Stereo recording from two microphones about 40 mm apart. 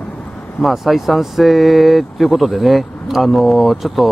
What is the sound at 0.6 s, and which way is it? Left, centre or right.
Speech, centre.